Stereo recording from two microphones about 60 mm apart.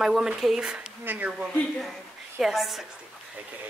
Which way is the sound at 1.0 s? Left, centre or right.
Right.